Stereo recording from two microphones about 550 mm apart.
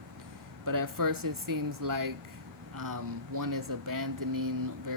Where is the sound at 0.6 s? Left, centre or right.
Right.